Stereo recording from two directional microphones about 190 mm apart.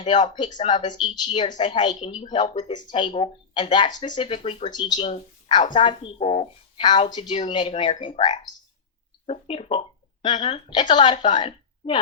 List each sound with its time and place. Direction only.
0.0 s speech: 35° left (ahead or behind)
0.3 s a woman's voice: 25° left (ahead or behind)